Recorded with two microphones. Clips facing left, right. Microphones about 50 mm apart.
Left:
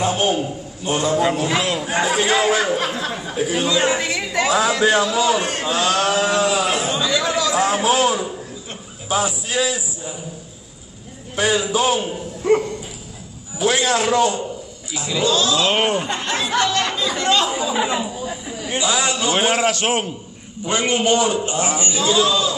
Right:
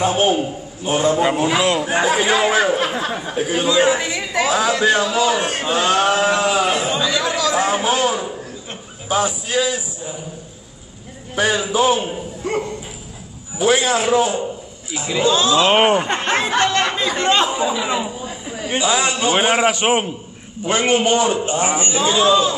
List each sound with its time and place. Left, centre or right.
0.0 s speech: centre
1.5 s speech: centre
5.6 s a man's voice: centre
6.6 s chatter: centre
7.5 s speech: centre
9.2 s a man's voice: centre
11.3 s a man's voice: right
17.8 s a man's voice: centre